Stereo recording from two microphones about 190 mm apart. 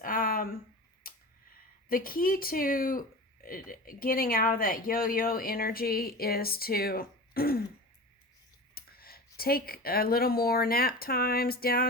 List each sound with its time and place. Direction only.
0.0 s a sound: 50° left (ahead or behind)
1.9 s speech: 50° left (ahead or behind)
8.7 s speech: 50° left (ahead or behind)